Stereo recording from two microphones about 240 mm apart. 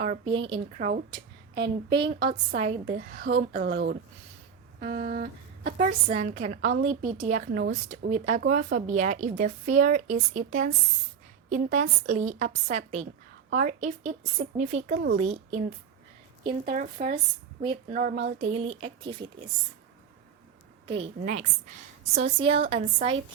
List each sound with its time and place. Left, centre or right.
0.0 s a woman's voice: right
1.5 s a woman's voice: right
2.0 s a woman's voice: centre
17.6 s a woman's voice: centre
17.9 s a woman's voice: right
18.3 s a woman's voice: right
20.8 s a woman's voice: right